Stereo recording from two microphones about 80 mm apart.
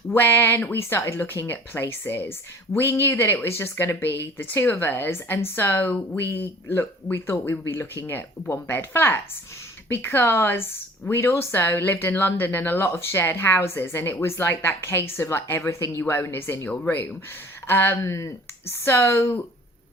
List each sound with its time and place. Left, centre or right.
0.1 s speech: left
17.7 s speech: left